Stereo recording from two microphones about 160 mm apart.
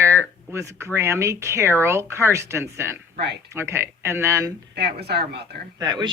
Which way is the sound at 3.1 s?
90° right.